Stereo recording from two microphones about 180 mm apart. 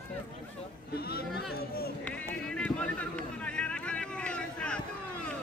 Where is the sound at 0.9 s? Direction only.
60° left (ahead or behind).